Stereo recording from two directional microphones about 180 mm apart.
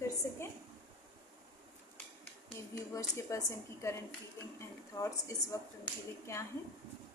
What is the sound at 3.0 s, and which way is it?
A woman's voice, 15° left (ahead or behind).